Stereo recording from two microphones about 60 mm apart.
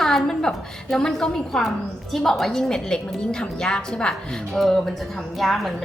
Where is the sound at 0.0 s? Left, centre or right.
Centre.